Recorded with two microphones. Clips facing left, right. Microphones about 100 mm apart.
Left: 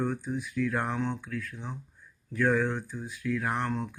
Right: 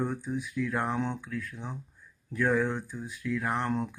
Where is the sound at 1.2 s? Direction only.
5° right (ahead or behind).